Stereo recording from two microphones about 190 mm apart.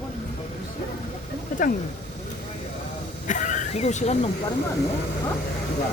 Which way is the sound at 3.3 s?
40° left (ahead or behind).